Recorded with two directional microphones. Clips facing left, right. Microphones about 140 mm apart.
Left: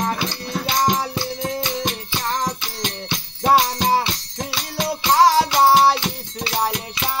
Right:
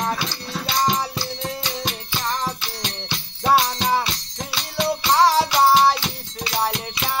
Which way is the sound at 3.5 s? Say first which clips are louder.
Left 2 dB; 35° left (ahead or behind).